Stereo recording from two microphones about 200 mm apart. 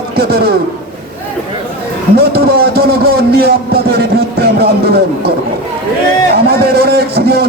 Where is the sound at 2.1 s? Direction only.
50° right (ahead or behind).